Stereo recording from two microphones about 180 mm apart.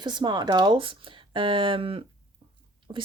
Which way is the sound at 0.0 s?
25° right (ahead or behind).